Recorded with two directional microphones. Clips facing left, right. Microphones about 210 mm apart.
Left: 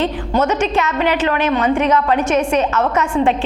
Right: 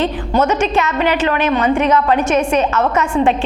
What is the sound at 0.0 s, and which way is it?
A woman's voice, 15° right (ahead or behind).